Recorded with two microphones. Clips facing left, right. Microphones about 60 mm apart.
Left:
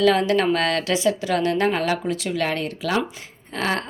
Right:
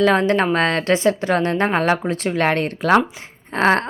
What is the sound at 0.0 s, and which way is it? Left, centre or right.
A woman's voice, right.